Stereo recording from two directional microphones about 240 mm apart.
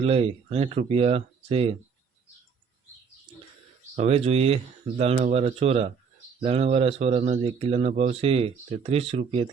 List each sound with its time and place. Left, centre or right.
0.0 s speech: right
3.9 s speech: right